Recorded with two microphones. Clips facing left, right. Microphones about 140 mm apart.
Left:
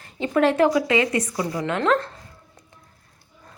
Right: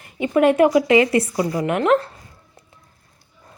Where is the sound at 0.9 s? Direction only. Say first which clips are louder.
Right 6 dB; 30° right (ahead or behind).